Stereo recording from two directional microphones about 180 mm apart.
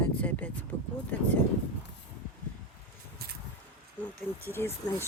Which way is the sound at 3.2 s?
60° right (ahead or behind).